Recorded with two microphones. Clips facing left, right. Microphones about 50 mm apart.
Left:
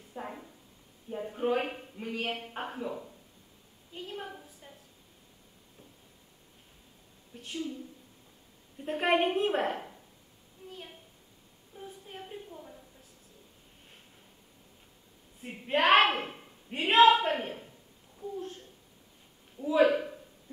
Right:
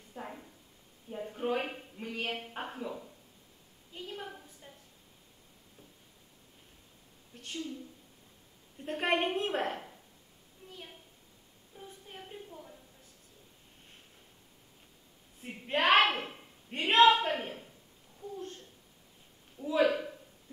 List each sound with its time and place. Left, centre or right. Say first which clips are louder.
0.1 s a woman's voice: left 3 dB; centre
3.9 s a sound: left 2 dB; centre
7.3 s a woman's voice: left 3 dB; centre
10.7 s a sound: left 2 dB; centre
15.4 s a woman's voice: left 2 dB; centre
18.2 s babbling: left 3 dB; centre
19.6 s a woman's voice: left 4 dB; centre